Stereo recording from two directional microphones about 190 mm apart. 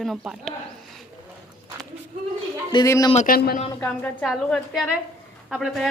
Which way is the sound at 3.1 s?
40° left (ahead or behind).